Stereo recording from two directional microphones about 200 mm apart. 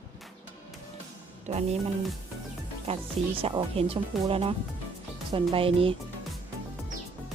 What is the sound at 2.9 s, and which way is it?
A woman's voice, 30° right (ahead or behind).